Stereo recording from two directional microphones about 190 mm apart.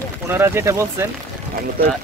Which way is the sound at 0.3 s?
15° right (ahead or behind).